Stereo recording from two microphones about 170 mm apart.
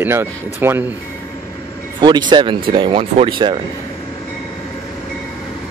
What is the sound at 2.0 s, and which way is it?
Speech, 25° right (ahead or behind).